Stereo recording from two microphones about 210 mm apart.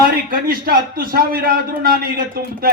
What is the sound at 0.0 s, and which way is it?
A man's voice, 45° right (ahead or behind).